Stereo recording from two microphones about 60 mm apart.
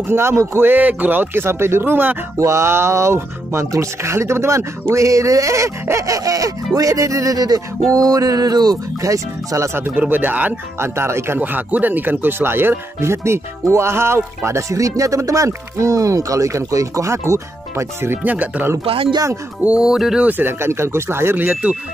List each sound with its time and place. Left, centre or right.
0.1 s speech: right
2.3 s speech: right
9.9 s speech: right
10.8 s speech: right
11.3 s speech: right
18.1 s speech: right
19.6 s music: centre
20.2 s speech: right